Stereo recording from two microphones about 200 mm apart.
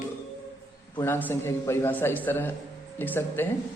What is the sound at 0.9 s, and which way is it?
A man's voice, 10° left (ahead or behind).